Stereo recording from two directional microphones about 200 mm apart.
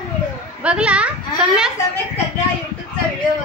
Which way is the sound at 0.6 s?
5° right (ahead or behind).